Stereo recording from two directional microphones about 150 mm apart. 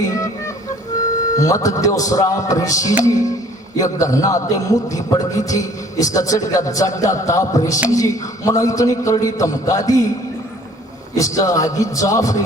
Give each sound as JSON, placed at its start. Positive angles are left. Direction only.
{"t": 0.0, "sound": "music", "side_deg": 20}
{"t": 1.4, "sound": "a man's voice", "side_deg": 20}
{"t": 11.1, "sound": "a man's voice", "side_deg": 20}